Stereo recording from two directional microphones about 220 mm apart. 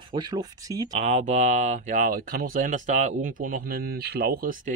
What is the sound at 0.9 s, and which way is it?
Speech, 35° right (ahead or behind).